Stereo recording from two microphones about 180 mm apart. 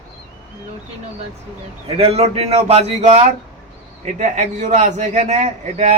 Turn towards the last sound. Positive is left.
turn(degrees=-40)  # may be behind; listen again after turning